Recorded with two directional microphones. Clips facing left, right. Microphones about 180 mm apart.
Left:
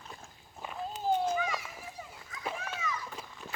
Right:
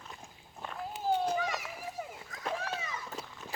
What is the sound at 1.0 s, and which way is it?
Children playing, 15° left (ahead or behind).